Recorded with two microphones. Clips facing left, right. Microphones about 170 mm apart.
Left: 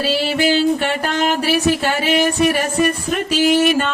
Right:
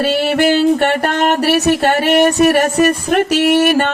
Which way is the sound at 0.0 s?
55° right (ahead or behind).